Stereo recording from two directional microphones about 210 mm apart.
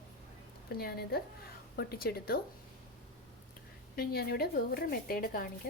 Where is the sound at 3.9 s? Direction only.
45° left (ahead or behind).